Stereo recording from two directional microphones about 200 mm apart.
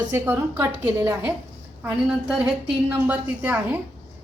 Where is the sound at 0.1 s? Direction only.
10° right (ahead or behind).